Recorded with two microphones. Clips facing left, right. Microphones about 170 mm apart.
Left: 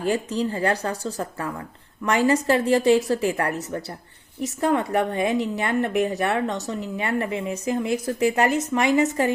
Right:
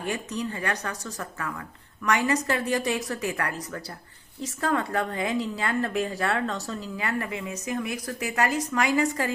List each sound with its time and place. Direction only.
0.0 s speech: 30° left (ahead or behind)